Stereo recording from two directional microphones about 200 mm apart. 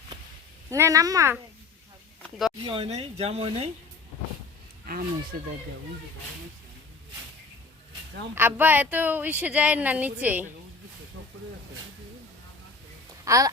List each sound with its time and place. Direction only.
0.7 s speech: 15° right (ahead or behind)
2.6 s speech: 30° right (ahead or behind)
8.4 s speech: 10° right (ahead or behind)
13.2 s speech: 15° right (ahead or behind)